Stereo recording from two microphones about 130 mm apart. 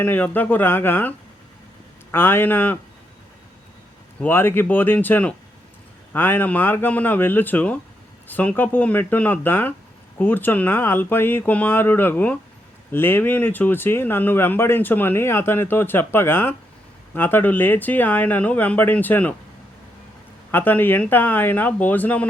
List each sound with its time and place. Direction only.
0.0 s speech: 15° left (ahead or behind)
2.1 s speech: 15° left (ahead or behind)
4.2 s speech: 15° left (ahead or behind)
20.5 s speech: 15° left (ahead or behind)